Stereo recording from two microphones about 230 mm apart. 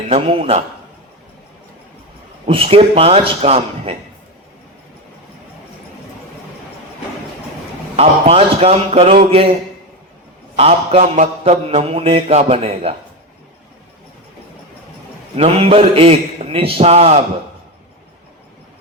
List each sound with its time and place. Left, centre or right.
0.1 s mantra: right
2.5 s mantra: right
7.9 s mantra: right
10.5 s mantra: right
15.4 s mantra: right